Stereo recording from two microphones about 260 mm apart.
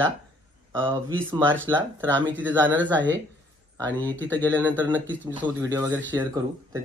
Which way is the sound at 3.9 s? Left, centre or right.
Centre.